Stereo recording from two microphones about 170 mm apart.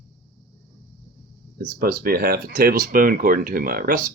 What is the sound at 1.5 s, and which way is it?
Speech, 60° right (ahead or behind).